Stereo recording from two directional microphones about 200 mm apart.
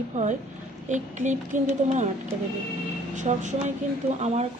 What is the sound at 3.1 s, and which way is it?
Speech, 35° right (ahead or behind).